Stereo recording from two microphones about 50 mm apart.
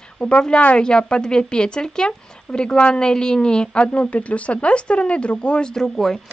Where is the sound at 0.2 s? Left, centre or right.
Centre.